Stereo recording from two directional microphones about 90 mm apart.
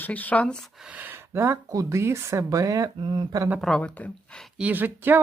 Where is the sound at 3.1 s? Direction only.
55° right (ahead or behind).